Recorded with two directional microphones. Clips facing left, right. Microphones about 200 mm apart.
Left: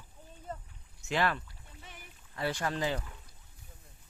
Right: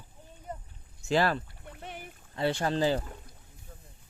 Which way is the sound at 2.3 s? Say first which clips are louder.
Right 5 dB; 25° right (ahead or behind).